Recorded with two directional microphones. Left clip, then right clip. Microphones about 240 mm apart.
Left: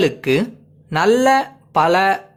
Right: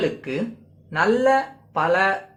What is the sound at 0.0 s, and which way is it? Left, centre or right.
Speech, left.